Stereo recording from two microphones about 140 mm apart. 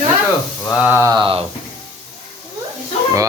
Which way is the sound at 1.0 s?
30° right (ahead or behind).